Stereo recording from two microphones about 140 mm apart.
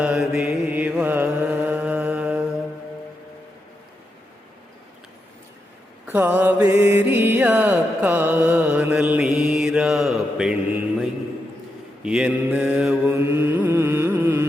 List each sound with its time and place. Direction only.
0.0 s mantra: centre (ahead or behind)
0.8 s mantra: 10° right (ahead or behind)
6.1 s music: 10° right (ahead or behind)
12.0 s mantra: 5° right (ahead or behind)
13.1 s carnatic music: 15° right (ahead or behind)